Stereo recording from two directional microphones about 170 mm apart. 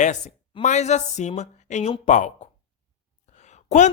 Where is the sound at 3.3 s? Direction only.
40° left (ahead or behind).